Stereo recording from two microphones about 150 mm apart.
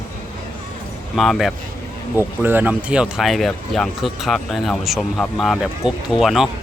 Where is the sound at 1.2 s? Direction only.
Centre (ahead or behind).